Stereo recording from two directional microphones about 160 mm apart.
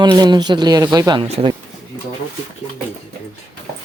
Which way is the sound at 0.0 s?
25° right (ahead or behind).